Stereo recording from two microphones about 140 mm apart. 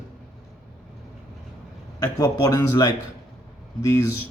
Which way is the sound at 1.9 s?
30° left (ahead or behind).